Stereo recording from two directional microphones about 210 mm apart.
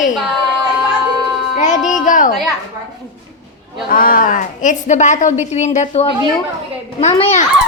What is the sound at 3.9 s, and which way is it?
A woman's voice, 40° left (ahead or behind).